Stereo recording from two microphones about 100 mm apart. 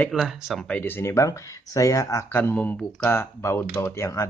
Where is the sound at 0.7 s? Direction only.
20° left (ahead or behind).